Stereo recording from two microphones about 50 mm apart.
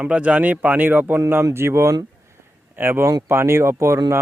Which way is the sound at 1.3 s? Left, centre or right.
Right.